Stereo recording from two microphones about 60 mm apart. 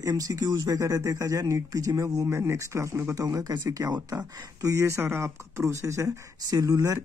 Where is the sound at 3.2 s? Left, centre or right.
Right.